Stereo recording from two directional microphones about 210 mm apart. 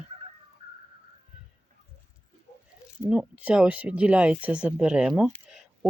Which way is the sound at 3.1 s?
5° right (ahead or behind).